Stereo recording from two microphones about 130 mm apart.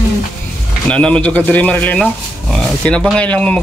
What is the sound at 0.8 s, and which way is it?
Speech, 10° left (ahead or behind).